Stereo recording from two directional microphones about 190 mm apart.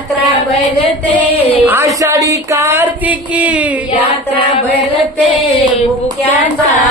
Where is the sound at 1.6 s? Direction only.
15° right (ahead or behind).